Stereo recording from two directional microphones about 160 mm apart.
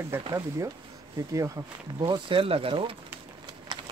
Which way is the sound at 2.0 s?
35° right (ahead or behind).